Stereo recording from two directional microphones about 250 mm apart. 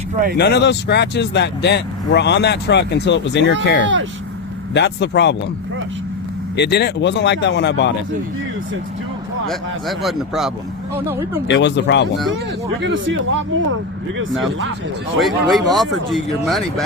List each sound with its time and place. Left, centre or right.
0.3 s speech: left
6.6 s speech: left
9.5 s speech: centre
11.4 s speech: left
12.8 s speech: right
15.2 s speech: centre